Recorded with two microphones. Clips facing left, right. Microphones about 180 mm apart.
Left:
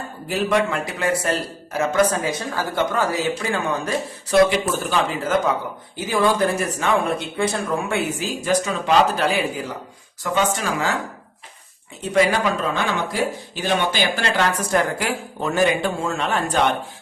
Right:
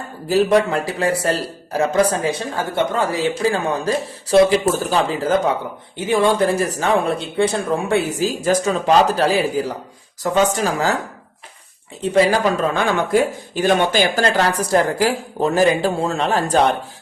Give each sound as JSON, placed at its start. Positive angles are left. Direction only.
{"t": 0.3, "sound": "speech", "side_deg": -35}
{"t": 12.0, "sound": "speech", "side_deg": -30}